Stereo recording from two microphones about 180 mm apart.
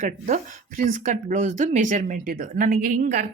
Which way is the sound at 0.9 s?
45° right (ahead or behind).